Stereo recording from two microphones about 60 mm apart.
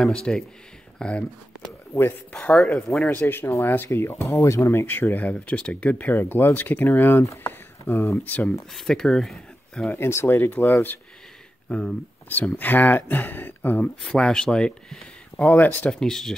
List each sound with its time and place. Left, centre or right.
0.0 s speech: centre
3.2 s speech: left
5.3 s speech: left
7.4 s a sound: left
8.2 s speech: left
8.7 s speech: centre
9.9 s speech: left
11.7 s speech: centre
12.3 s speech: left
14.1 s speech: centre
15.4 s speech: left
15.9 s speech: centre